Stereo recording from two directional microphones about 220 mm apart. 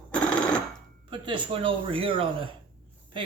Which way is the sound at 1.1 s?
20° right (ahead or behind).